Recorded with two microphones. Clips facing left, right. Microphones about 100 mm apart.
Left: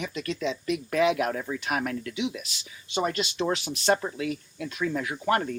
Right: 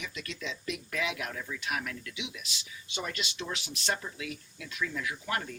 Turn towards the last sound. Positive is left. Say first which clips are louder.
# left 9 dB
turn(degrees=45)  # may be behind; listen again after turning